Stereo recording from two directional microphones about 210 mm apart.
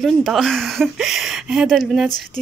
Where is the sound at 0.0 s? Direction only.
Centre (ahead or behind).